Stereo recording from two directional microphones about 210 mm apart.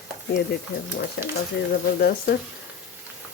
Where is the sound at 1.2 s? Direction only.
55° left (ahead or behind).